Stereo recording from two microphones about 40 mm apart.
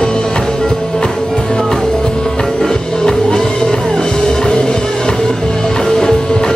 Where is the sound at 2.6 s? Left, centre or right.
Centre.